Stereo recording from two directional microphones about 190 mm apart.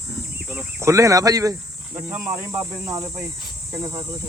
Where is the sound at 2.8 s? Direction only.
15° right (ahead or behind).